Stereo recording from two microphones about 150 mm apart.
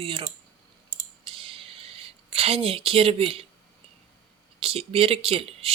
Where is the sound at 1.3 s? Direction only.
40° right (ahead or behind).